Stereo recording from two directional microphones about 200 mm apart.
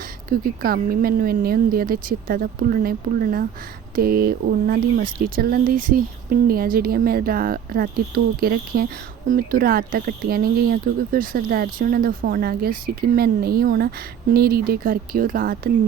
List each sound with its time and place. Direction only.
0.3 s speech: 50° right (ahead or behind)